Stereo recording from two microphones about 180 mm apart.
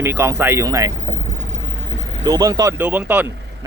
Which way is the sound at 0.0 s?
15° right (ahead or behind).